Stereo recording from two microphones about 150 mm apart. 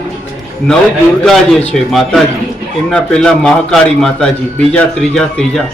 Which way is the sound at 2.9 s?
5° left (ahead or behind).